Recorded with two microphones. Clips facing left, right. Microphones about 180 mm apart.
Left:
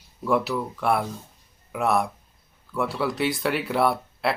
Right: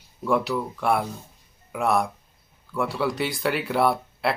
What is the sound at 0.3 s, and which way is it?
Speech, centre (ahead or behind).